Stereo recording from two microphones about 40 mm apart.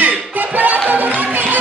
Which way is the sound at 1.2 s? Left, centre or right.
Right.